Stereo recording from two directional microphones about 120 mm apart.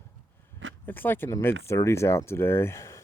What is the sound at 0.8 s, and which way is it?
Speech, 15° left (ahead or behind).